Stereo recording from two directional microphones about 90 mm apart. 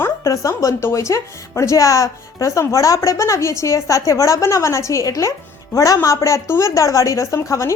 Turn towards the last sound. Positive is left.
turn(degrees=35)  # may be behind; listen again after turning